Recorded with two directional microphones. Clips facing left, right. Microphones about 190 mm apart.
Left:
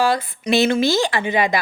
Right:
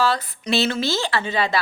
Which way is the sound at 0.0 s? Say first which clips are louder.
Left 3 dB; 10° left (ahead or behind).